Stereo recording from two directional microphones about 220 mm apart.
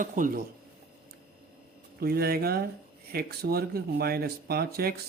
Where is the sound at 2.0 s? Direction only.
45° right (ahead or behind).